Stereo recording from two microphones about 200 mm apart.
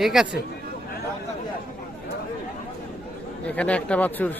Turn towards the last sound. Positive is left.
turn(degrees=10)  # may be behind; listen again after turning